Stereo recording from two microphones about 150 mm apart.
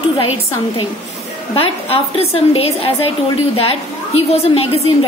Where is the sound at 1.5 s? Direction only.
40° left (ahead or behind).